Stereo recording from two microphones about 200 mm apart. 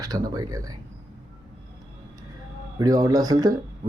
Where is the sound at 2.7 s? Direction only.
15° right (ahead or behind).